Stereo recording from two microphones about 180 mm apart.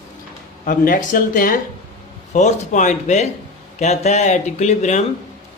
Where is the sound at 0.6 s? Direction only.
50° left (ahead or behind).